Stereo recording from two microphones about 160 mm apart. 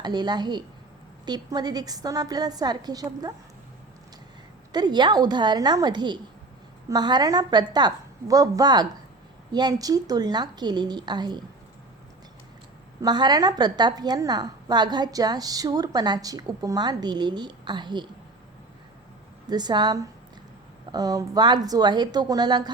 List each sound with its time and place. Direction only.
0.0 s a woman's voice: 25° right (ahead or behind)
4.7 s a woman's voice: 25° right (ahead or behind)
13.0 s a woman's voice: 25° right (ahead or behind)
19.5 s a woman's voice: 25° right (ahead or behind)